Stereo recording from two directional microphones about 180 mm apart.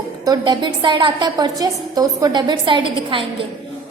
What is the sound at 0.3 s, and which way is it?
A woman's voice, 25° right (ahead or behind).